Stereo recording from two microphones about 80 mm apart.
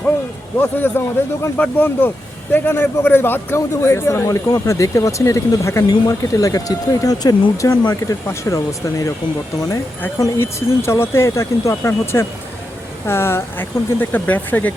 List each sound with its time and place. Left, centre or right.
0.8 s speech: left
4.4 s speech: left
5.9 s speech: left
8.3 s speech: left
10.3 s speech: left